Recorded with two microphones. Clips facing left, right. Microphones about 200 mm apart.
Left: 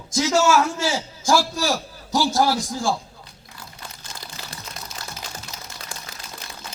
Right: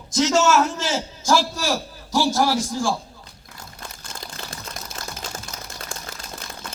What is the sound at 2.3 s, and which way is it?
Speech, 15° left (ahead or behind).